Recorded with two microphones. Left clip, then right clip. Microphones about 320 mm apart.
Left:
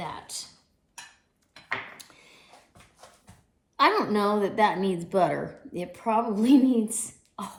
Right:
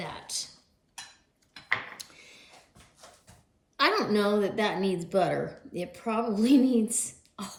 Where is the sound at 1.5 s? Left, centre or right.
Centre.